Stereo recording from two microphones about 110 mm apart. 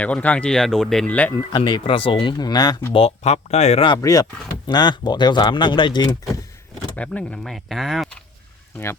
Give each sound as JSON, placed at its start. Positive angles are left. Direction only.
{"t": 0.0, "sound": "speech", "side_deg": 15}
{"t": 1.5, "sound": "speech", "side_deg": 45}
{"t": 2.9, "sound": "speech", "side_deg": 65}
{"t": 3.8, "sound": "speech", "side_deg": 35}
{"t": 6.9, "sound": "speech", "side_deg": 10}
{"t": 7.5, "sound": "speech", "side_deg": 0}